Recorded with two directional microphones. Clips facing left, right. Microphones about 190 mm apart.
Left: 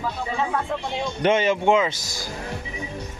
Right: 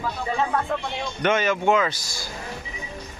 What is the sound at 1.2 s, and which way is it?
A man's voice, 30° left (ahead or behind).